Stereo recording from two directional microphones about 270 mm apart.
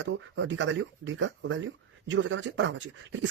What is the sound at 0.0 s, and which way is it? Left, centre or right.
Speech, right.